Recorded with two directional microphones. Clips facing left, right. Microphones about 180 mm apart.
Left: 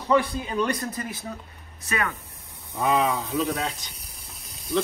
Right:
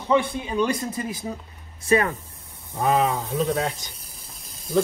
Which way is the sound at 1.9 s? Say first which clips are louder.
Right 8 dB; 30° right (ahead or behind).